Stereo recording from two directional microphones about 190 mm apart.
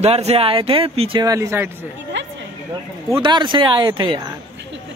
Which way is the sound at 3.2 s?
25° right (ahead or behind).